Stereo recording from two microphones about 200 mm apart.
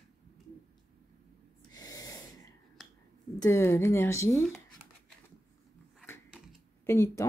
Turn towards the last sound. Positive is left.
turn(degrees=15)  # may be behind; listen again after turning